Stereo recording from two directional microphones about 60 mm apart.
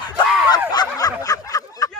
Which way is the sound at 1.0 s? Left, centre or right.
Left.